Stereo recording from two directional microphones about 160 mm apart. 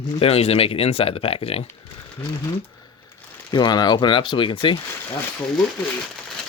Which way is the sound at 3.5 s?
25° left (ahead or behind).